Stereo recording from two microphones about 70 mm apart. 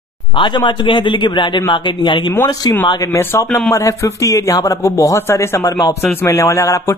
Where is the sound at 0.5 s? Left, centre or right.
Left.